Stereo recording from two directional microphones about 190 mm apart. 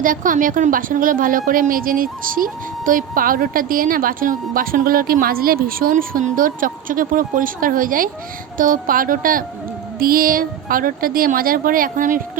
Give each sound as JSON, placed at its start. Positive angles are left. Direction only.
{"t": 0.0, "sound": "a woman's voice", "side_deg": -45}